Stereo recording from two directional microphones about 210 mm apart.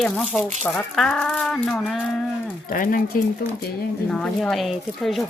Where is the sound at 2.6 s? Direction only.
40° left (ahead or behind).